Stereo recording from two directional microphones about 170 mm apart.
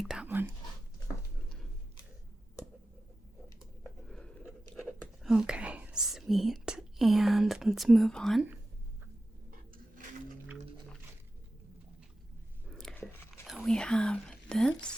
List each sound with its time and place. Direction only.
0.0 s whispering: 5° right (ahead or behind)
3.6 s chewing: 5° left (ahead or behind)
9.5 s a sound: 55° right (ahead or behind)
12.6 s biting: centre (ahead or behind)
13.7 s speech: 5° left (ahead or behind)